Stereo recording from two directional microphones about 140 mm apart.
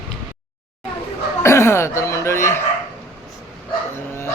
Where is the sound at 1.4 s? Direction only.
20° left (ahead or behind).